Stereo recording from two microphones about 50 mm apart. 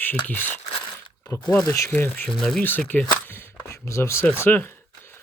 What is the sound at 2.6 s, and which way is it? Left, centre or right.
Speech, left.